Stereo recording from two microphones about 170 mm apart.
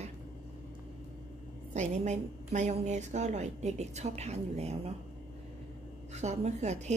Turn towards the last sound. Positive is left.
turn(degrees=-40)  # may be behind; listen again after turning